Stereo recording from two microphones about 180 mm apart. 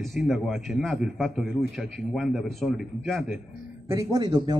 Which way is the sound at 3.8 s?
20° right (ahead or behind).